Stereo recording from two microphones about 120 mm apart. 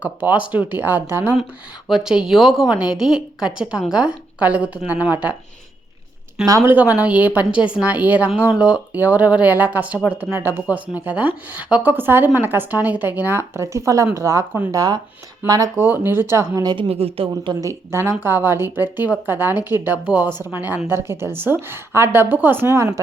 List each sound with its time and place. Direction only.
0.0 s a woman's voice: 15° right (ahead or behind)
1.9 s a woman's voice: 5° right (ahead or behind)
6.4 s speech: 25° right (ahead or behind)
6.7 s a woman's voice: 15° right (ahead or behind)
16.9 s speech: 55° right (ahead or behind)
17.5 s a woman's voice: 25° right (ahead or behind)